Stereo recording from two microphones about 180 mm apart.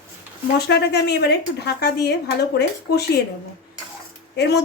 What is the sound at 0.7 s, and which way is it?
A woman's voice, 65° left (ahead or behind).